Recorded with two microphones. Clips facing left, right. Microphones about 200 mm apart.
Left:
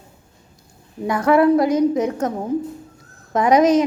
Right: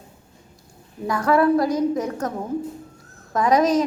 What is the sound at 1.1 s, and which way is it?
A woman's voice, 20° left (ahead or behind).